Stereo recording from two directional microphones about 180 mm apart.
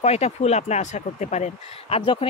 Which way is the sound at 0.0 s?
35° left (ahead or behind).